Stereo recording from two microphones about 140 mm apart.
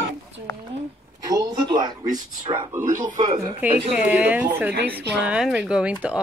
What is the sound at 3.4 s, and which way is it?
Speech, 10° right (ahead or behind).